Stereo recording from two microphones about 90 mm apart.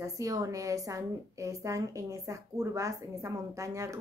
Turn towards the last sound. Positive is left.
turn(degrees=-35)  # may be behind; listen again after turning